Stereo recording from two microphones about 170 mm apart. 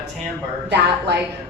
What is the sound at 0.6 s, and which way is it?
Speech, 80° right.